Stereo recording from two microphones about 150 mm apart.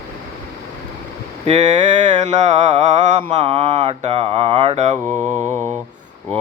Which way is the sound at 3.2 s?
30° right (ahead or behind).